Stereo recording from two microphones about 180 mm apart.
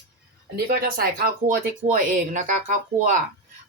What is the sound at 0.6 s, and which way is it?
Speech, 55° right (ahead or behind).